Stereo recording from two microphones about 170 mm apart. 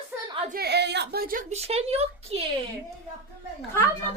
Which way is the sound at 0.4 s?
65° right (ahead or behind).